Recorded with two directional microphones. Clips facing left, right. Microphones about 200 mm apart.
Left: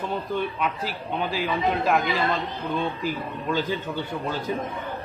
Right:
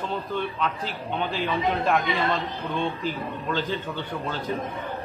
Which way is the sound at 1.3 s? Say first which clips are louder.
Left 1 dB; 5° left (ahead or behind).